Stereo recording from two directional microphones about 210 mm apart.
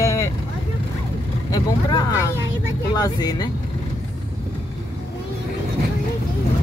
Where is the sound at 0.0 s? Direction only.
15° left (ahead or behind).